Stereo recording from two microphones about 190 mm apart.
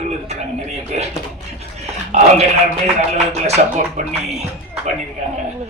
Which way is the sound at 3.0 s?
35° right (ahead or behind).